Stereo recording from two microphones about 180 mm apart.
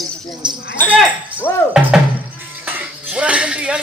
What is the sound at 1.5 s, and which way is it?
Speech, 15° left (ahead or behind).